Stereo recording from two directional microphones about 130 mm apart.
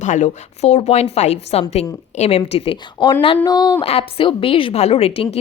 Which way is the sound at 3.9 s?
45° left (ahead or behind).